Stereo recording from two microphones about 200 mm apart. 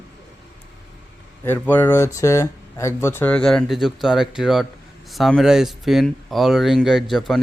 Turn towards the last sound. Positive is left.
turn(degrees=0)  # may be behind; listen again after turning